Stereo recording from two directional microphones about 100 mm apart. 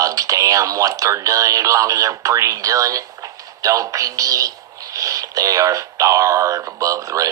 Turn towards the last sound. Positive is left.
turn(degrees=-35)  # may be behind; listen again after turning